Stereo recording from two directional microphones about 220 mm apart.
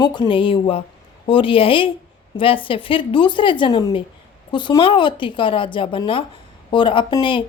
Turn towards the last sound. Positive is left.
turn(degrees=20)  # may be behind; listen again after turning